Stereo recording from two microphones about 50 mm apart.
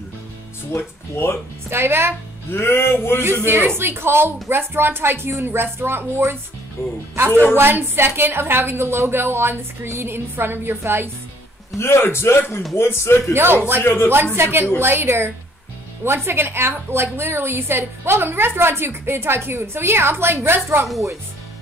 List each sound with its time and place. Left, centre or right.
0.7 s a man's voice: left
1.7 s a woman's voice: right
2.5 s music: left
3.4 s a woman's voice: right
7.5 s a woman's voice: right
11.8 s a man's voice: left
13.3 s a woman's voice: right
20.6 s speech: right